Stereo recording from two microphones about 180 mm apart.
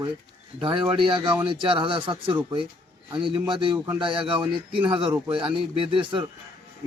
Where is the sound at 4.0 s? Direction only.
30° right (ahead or behind).